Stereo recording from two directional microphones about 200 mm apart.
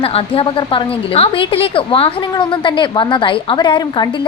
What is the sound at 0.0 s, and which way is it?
A woman's voice, 25° left (ahead or behind).